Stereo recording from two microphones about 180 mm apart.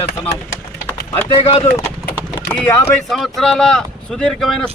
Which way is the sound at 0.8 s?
10° left (ahead or behind).